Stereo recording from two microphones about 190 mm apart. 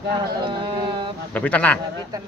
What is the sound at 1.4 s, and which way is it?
Speech, 5° left (ahead or behind).